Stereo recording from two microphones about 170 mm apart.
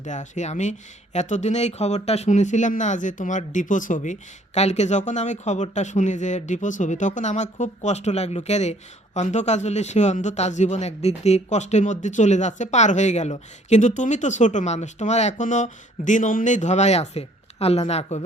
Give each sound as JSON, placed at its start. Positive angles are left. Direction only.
{"t": 0.0, "sound": "speech", "side_deg": 45}